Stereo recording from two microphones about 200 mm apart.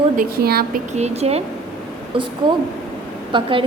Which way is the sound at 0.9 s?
35° right (ahead or behind).